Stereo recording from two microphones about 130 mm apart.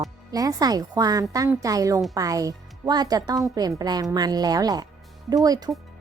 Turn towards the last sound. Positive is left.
turn(degrees=-30)  # may be behind; listen again after turning